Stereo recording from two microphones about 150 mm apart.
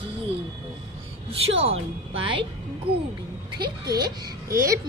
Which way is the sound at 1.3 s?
40° right (ahead or behind).